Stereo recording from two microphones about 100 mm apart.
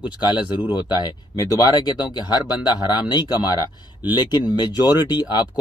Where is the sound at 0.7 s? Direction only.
45° left (ahead or behind).